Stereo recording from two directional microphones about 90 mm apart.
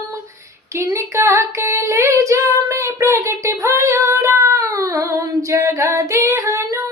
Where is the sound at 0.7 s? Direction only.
30° right (ahead or behind).